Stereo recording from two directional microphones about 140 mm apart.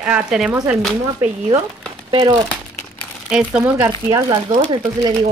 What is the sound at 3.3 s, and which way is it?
Speech, 10° right (ahead or behind).